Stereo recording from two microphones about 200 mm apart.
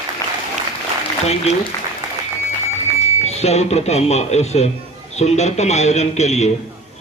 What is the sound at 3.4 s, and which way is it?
Speech, 30° left (ahead or behind).